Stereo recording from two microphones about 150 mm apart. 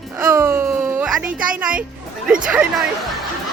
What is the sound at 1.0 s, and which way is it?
Speech, 5° right (ahead or behind).